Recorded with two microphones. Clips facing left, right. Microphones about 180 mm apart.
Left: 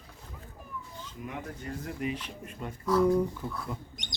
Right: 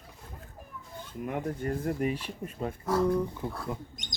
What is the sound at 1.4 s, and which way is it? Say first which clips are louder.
Speech: right 7 dB; 50° right (ahead or behind).